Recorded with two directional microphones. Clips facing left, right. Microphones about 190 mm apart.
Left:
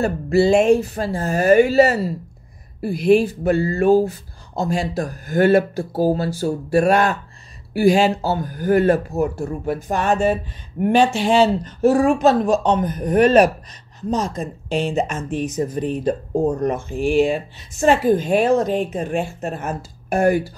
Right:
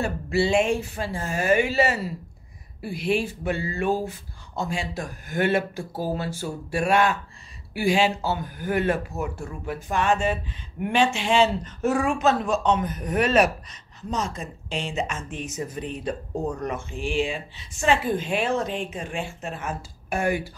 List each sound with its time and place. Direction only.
0.0 s speech: 40° left (ahead or behind)
14.8 s speech: 55° left (ahead or behind)
15.0 s speech: 40° left (ahead or behind)